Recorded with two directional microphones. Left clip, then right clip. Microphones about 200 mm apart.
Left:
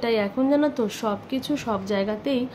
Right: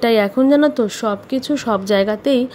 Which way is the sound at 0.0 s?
40° right (ahead or behind).